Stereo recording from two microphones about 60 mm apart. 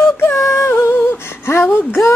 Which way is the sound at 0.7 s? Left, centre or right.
Left.